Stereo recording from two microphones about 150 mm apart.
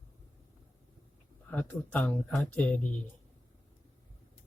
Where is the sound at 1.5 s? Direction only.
10° left (ahead or behind).